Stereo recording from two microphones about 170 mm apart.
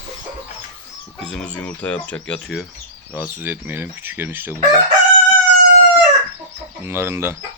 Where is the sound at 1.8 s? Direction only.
10° left (ahead or behind).